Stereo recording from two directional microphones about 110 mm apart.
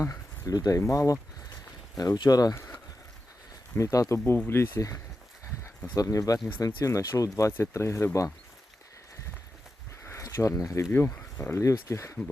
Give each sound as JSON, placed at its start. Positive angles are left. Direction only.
{"t": 0.0, "sound": "speech", "side_deg": 30}
{"t": 10.0, "sound": "a sound", "side_deg": 25}
{"t": 11.2, "sound": "speech", "side_deg": 20}